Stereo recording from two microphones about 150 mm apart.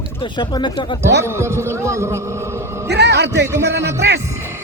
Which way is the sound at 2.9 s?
90° right.